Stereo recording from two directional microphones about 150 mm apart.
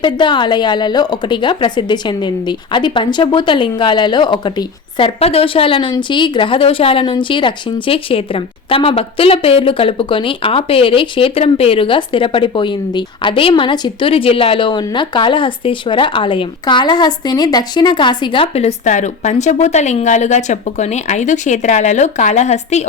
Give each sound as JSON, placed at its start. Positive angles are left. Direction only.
{"t": 0.0, "sound": "a woman's voice", "side_deg": 30}